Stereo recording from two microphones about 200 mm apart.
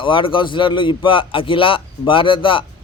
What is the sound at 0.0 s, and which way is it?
Speech, 25° left (ahead or behind).